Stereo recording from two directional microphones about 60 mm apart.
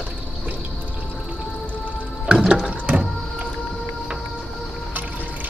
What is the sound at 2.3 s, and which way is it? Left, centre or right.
Music, centre.